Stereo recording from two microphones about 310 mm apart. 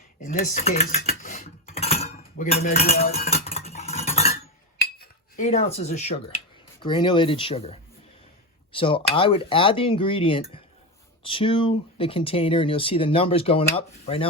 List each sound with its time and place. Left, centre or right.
0.3 s cutlery: left
6.8 s speech: centre